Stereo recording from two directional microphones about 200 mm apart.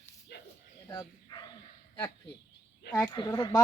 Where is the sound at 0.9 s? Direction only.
20° left (ahead or behind).